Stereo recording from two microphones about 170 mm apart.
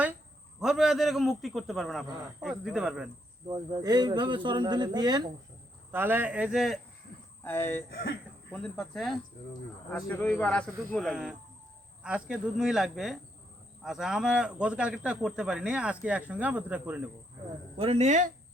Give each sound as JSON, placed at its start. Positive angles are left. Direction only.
{"t": 0.6, "sound": "a man's voice", "side_deg": 0}
{"t": 3.5, "sound": "speech", "side_deg": -25}
{"t": 5.9, "sound": "speech", "side_deg": -10}
{"t": 7.4, "sound": "speech", "side_deg": 15}
{"t": 7.9, "sound": "speech", "side_deg": 70}
{"t": 8.5, "sound": "a man's voice", "side_deg": 5}
{"t": 17.7, "sound": "speech", "side_deg": -35}